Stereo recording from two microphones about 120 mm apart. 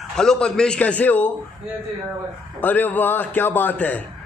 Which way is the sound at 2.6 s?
15° left (ahead or behind).